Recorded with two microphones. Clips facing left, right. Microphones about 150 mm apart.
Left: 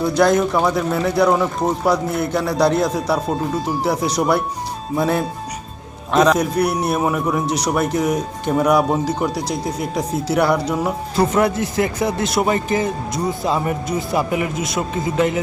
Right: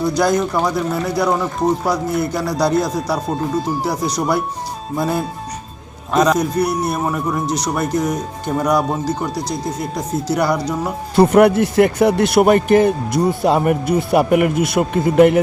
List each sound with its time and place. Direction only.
0.2 s speech: 5° right (ahead or behind)
11.3 s speech: 60° right (ahead or behind)